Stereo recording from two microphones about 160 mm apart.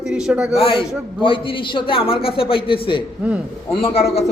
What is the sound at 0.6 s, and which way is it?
A man's voice, 35° left (ahead or behind).